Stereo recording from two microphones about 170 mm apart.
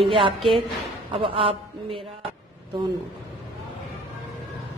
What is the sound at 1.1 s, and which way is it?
Speech, 30° right (ahead or behind).